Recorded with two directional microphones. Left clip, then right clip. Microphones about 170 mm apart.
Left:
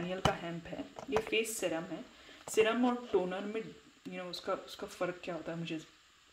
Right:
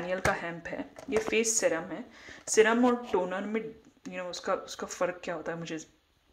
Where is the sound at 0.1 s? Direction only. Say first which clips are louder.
Right 5 dB; 15° right (ahead or behind).